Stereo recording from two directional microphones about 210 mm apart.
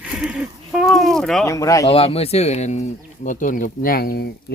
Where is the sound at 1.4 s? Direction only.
15° left (ahead or behind).